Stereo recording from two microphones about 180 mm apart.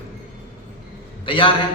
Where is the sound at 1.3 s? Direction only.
25° left (ahead or behind).